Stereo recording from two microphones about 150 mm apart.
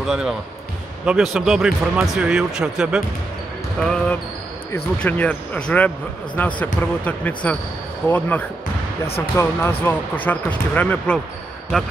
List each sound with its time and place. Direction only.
0.0 s speech: 5° right (ahead or behind)